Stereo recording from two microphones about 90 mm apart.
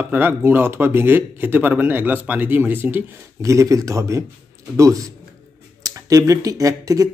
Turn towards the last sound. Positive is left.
turn(degrees=-40)  # may be behind; listen again after turning